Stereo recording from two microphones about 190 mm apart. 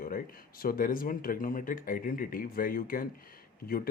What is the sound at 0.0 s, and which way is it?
Speech, 50° left (ahead or behind).